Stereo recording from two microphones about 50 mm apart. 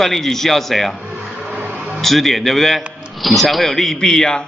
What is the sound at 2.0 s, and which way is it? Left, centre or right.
A man's voice, centre.